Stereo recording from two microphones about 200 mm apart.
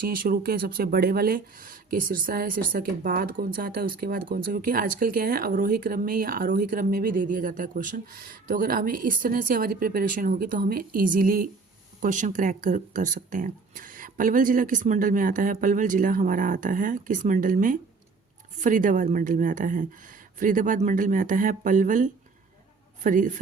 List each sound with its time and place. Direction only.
0.0 s speech: 45° right (ahead or behind)